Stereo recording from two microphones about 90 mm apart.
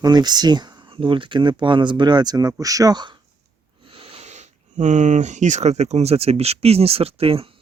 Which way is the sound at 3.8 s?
90° right.